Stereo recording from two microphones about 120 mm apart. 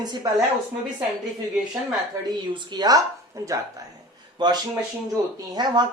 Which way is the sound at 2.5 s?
40° right (ahead or behind).